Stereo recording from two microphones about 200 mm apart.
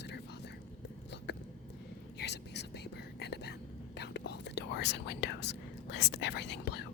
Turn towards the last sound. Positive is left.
turn(degrees=55)  # may be behind; listen again after turning